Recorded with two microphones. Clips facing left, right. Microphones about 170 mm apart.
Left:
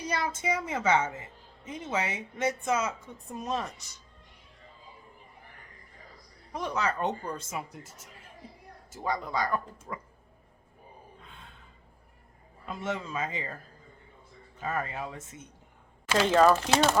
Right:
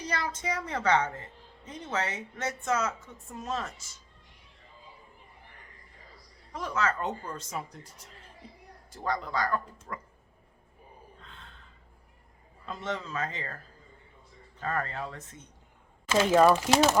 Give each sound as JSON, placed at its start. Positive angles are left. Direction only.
{"t": 0.0, "sound": "a woman's voice", "side_deg": 10}
{"t": 6.5, "sound": "a woman's voice", "side_deg": 20}
{"t": 8.9, "sound": "a woman's voice", "side_deg": 10}
{"t": 11.2, "sound": "gasp", "side_deg": 10}
{"t": 12.6, "sound": "a woman's voice", "side_deg": 10}
{"t": 14.6, "sound": "a woman's voice", "side_deg": 10}
{"t": 16.2, "sound": "speech", "side_deg": -5}